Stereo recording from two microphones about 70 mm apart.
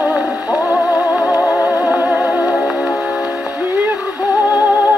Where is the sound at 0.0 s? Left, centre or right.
Right.